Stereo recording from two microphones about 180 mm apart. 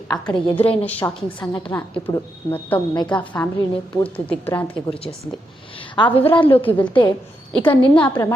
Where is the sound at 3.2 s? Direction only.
10° left (ahead or behind).